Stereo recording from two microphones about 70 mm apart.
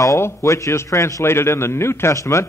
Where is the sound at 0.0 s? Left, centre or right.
Left.